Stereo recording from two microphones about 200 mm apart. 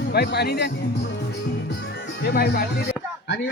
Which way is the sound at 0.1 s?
55° left (ahead or behind).